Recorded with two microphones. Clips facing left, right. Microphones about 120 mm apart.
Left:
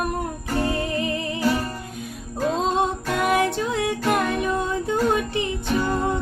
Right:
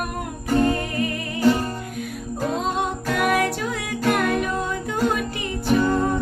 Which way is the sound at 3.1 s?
25° left (ahead or behind).